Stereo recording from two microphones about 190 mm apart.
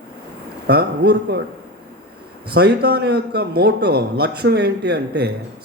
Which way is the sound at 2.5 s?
55° right (ahead or behind).